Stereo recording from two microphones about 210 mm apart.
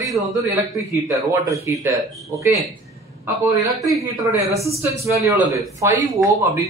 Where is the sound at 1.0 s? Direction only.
15° right (ahead or behind).